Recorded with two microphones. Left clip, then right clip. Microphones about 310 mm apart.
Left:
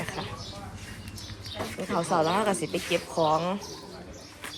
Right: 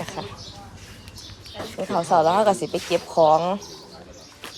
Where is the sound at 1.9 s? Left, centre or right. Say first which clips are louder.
Right 7 dB; centre.